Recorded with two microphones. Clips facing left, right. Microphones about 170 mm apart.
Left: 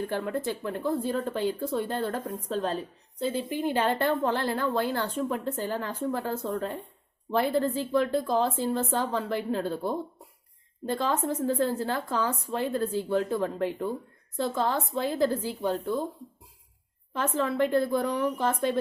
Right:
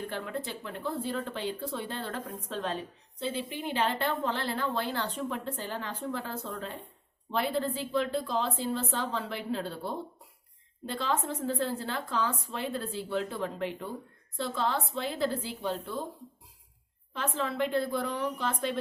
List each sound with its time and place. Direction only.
0.1 s speech: 45° left (ahead or behind)
17.2 s speech: 50° left (ahead or behind)